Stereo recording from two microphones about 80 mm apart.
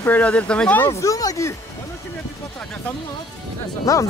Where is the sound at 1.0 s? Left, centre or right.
Left.